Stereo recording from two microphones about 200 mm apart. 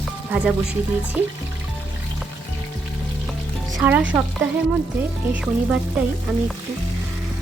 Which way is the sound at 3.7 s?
20° right (ahead or behind).